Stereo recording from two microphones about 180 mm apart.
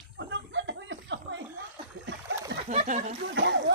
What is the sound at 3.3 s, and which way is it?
Speech, 80° right.